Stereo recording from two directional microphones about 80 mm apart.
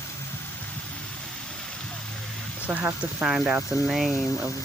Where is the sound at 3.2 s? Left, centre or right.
Centre.